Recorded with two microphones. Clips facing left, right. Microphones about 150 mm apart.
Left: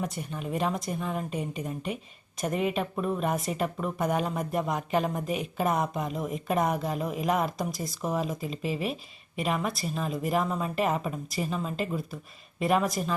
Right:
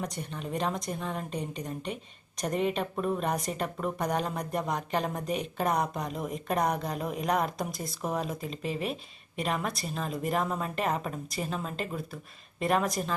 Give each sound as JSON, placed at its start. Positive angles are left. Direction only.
{"t": 0.0, "sound": "speech", "side_deg": 5}